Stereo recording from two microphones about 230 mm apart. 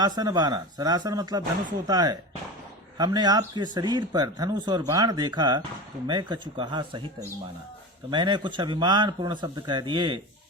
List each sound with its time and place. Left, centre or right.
0.0 s speech: centre
8.1 s speech: centre